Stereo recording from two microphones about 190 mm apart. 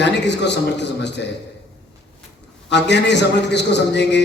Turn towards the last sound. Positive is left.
turn(degrees=65)  # may be behind; listen again after turning